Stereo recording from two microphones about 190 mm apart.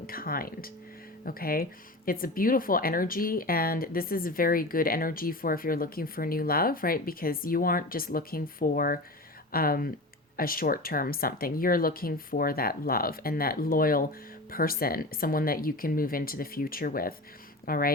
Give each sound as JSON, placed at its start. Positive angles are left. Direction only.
{"t": 0.1, "sound": "speech", "side_deg": 50}